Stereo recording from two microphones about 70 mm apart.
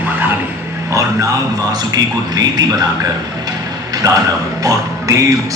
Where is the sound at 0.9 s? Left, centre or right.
Right.